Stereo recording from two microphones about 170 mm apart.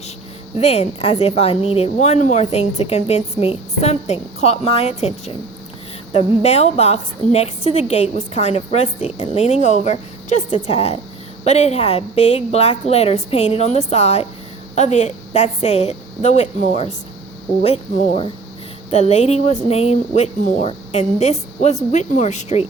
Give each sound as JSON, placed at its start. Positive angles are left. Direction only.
{"t": 0.5, "sound": "speech", "side_deg": 40}